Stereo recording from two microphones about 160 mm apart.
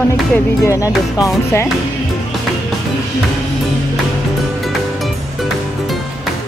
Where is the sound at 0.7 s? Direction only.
20° left (ahead or behind).